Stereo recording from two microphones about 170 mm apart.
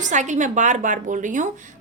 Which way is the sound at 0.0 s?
45° right (ahead or behind).